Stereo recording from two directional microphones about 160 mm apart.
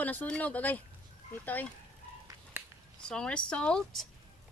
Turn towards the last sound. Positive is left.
turn(degrees=5)  # may be behind; listen again after turning